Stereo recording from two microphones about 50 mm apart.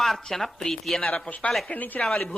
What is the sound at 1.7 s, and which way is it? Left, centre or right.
Speech, left.